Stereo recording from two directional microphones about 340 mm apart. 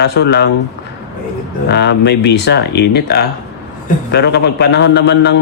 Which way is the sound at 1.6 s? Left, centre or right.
Left.